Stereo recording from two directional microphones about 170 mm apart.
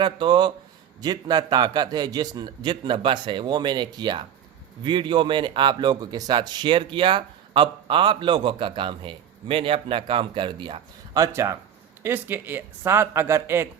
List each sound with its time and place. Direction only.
0.0 s speech: 25° right (ahead or behind)